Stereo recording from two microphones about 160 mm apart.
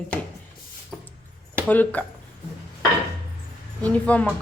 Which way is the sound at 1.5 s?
10° left (ahead or behind).